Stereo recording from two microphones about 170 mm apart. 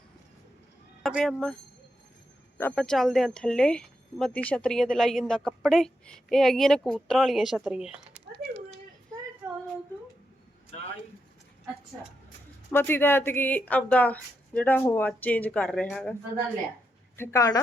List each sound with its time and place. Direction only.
1.0 s speech: centre (ahead or behind)
2.6 s speech: 10° left (ahead or behind)
12.7 s speech: 15° left (ahead or behind)
17.2 s a woman's voice: 20° left (ahead or behind)